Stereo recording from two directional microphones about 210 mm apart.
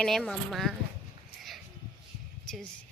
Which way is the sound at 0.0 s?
Centre (ahead or behind).